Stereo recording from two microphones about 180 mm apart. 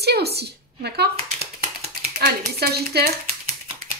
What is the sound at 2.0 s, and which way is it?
Speech, 60° right (ahead or behind).